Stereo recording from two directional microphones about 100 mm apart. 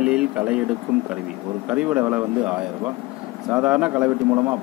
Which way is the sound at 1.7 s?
15° right (ahead or behind).